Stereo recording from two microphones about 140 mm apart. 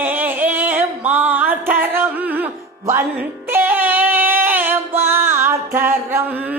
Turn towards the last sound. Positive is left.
turn(degrees=-10)  # may be behind; listen again after turning